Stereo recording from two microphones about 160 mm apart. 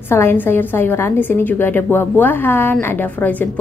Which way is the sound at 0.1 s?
15° left (ahead or behind).